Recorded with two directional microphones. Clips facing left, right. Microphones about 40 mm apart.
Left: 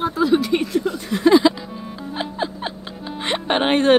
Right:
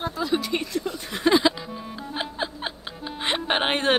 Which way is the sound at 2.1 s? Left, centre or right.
Centre.